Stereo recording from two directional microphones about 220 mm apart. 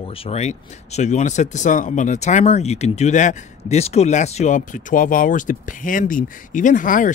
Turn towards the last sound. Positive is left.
turn(degrees=35)  # may be behind; listen again after turning